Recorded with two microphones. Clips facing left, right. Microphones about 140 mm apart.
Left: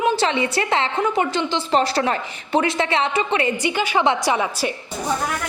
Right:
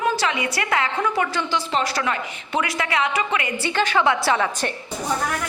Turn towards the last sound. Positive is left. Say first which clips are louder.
# even
turn(degrees=15)  # may be behind; listen again after turning